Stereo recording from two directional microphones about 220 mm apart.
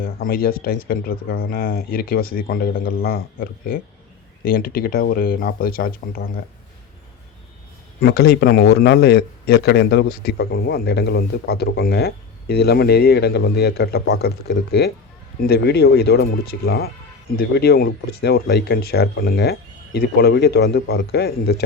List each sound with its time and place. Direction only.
0.3 s a man's voice: 40° left (ahead or behind)
8.0 s a man's voice: 50° left (ahead or behind)